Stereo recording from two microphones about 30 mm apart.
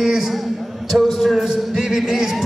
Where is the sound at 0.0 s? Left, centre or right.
Centre.